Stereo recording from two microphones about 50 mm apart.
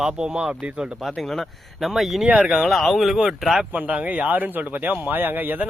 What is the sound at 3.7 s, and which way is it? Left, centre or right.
Speech, right.